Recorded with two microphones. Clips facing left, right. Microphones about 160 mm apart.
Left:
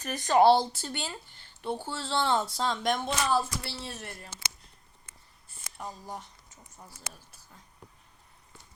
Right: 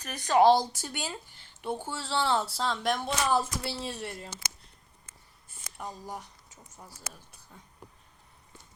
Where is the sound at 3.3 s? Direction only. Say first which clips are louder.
Right 2 dB; 15° right (ahead or behind).